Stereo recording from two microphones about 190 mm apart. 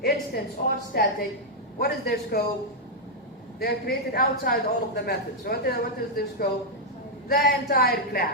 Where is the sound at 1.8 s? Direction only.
55° left (ahead or behind).